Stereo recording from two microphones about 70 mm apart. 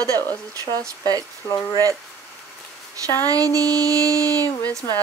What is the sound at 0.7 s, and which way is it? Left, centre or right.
Music, right.